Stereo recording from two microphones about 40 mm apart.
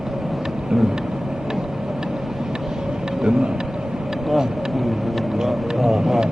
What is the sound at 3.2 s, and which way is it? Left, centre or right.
Speech, centre.